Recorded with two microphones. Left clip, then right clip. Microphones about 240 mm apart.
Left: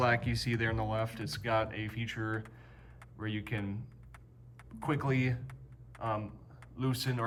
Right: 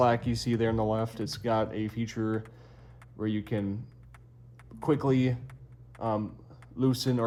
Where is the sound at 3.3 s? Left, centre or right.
Centre.